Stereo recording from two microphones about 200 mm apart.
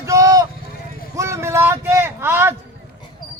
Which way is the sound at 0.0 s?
15° right (ahead or behind).